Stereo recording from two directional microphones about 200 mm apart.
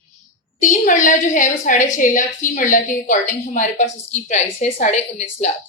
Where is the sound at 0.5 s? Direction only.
40° left (ahead or behind).